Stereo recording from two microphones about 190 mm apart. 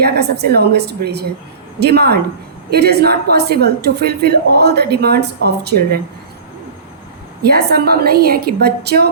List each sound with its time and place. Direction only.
0.0 s a woman's voice: 60° right (ahead or behind)
7.4 s a woman's voice: 55° right (ahead or behind)